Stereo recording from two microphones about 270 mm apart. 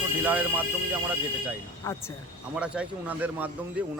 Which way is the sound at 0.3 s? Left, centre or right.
Centre.